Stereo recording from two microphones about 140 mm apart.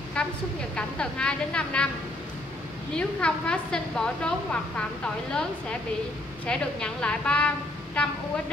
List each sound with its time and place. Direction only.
0.2 s a sound: 5° left (ahead or behind)
0.7 s a woman's voice: 5° left (ahead or behind)
3.0 s a woman's voice: 5° left (ahead or behind)